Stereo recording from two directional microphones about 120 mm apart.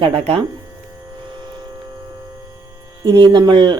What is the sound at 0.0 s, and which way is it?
Speech, 50° right (ahead or behind).